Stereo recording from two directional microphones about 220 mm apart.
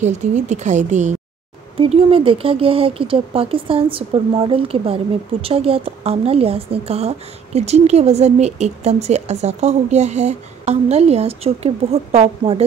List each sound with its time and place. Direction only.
0.0 s speech: 30° right (ahead or behind)